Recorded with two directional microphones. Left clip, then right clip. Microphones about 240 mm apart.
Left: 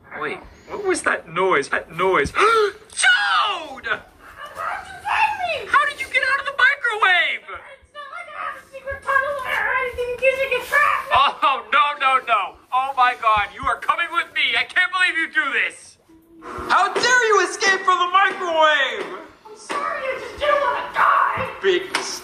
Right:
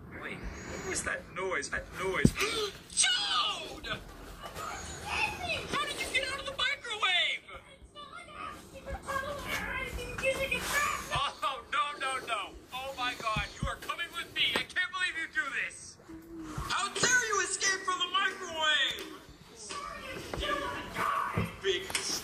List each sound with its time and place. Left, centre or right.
0.1 s vehicle: left
0.9 s speech: left
4.6 s a sound: left
19.7 s music: left